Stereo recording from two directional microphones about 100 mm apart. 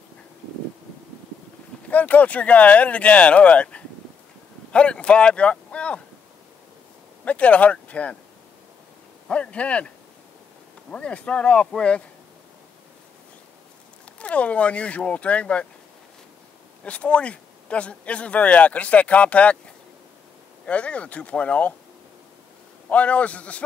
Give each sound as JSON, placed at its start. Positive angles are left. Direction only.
{"t": 1.9, "sound": "speech", "side_deg": 15}
{"t": 7.2, "sound": "speech", "side_deg": 15}
{"t": 9.3, "sound": "speech", "side_deg": 10}
{"t": 14.1, "sound": "speech", "side_deg": 10}
{"t": 16.8, "sound": "speech", "side_deg": 10}
{"t": 20.6, "sound": "speech", "side_deg": 15}
{"t": 22.8, "sound": "speech", "side_deg": 15}